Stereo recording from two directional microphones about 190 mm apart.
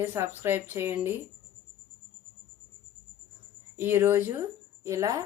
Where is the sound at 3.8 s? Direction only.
10° right (ahead or behind).